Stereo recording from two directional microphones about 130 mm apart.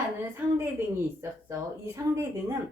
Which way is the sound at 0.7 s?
20° right (ahead or behind).